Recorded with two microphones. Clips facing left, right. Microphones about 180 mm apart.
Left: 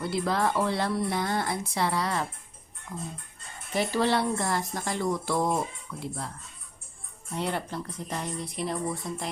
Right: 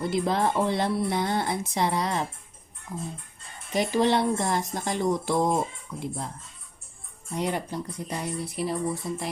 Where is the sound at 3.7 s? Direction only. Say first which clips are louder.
Right 3 dB; 20° right (ahead or behind).